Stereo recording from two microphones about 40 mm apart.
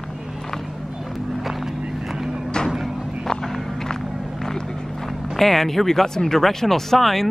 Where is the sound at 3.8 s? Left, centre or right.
Centre.